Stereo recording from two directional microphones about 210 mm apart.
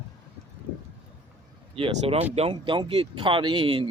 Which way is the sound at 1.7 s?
25° right (ahead or behind).